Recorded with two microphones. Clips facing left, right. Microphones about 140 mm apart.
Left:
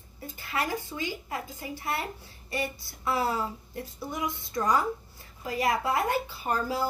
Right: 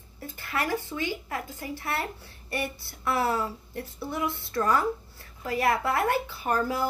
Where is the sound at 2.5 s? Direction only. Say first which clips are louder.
Even; 60° right (ahead or behind).